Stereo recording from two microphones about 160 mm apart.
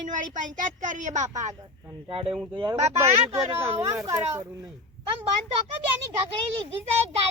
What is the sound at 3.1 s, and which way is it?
Speech, 40° right (ahead or behind).